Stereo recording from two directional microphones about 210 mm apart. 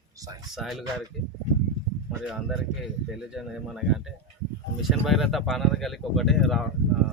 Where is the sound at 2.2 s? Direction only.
Centre (ahead or behind).